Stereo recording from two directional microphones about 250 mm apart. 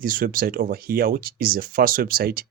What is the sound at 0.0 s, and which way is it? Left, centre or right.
Speech, right.